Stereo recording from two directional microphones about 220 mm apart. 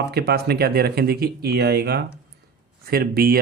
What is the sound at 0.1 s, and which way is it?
Speech, 45° right (ahead or behind).